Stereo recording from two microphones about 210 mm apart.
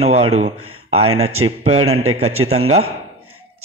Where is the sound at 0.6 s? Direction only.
90° right.